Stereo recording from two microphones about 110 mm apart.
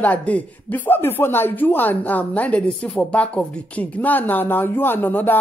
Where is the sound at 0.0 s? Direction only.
15° left (ahead or behind).